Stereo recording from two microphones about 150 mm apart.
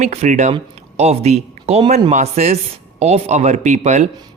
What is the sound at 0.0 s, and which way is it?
Speech, 50° right (ahead or behind).